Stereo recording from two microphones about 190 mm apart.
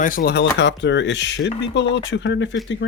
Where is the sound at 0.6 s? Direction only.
65° left (ahead or behind).